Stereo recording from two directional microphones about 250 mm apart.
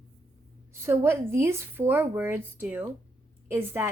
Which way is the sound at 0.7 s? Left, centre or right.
Centre.